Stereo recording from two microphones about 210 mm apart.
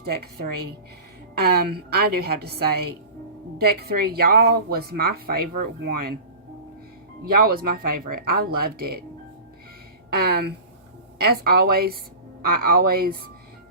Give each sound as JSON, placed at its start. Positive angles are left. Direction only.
{"t": 0.0, "sound": "speech", "side_deg": -45}
{"t": 7.3, "sound": "speech", "side_deg": -45}
{"t": 10.1, "sound": "speech", "side_deg": -50}